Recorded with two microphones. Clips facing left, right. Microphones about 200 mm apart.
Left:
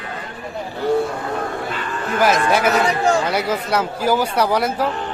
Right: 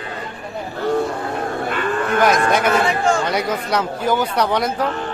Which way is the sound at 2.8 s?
35° left (ahead or behind).